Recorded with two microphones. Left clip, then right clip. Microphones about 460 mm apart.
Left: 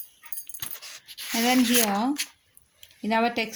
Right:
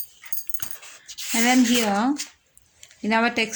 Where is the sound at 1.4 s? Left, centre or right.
Left.